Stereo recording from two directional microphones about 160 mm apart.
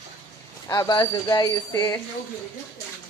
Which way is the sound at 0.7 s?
25° left (ahead or behind).